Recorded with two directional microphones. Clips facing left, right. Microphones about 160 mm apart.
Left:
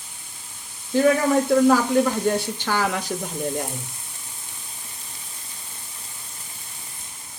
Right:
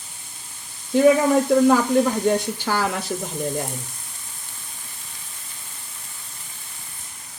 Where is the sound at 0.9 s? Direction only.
15° right (ahead or behind).